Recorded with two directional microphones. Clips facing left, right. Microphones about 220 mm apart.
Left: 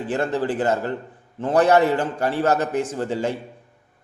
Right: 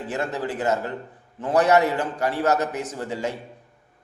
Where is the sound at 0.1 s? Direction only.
30° left (ahead or behind).